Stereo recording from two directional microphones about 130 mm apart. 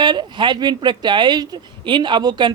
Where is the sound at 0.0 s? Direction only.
35° right (ahead or behind).